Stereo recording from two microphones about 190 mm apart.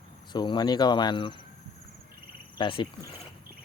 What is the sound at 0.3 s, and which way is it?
Speech, 20° left (ahead or behind).